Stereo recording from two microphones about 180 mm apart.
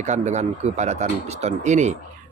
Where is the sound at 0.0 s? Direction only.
40° right (ahead or behind).